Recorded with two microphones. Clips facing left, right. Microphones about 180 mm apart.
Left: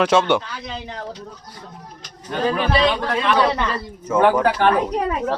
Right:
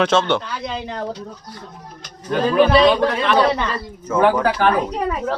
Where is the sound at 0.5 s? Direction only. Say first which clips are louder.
Right 5 dB; 70° right (ahead or behind).